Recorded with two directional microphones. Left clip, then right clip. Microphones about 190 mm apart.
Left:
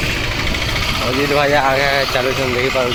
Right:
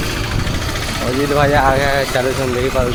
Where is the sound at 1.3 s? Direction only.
25° right (ahead or behind).